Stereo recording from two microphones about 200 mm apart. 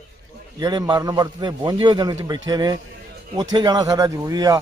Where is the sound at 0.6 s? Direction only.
20° right (ahead or behind).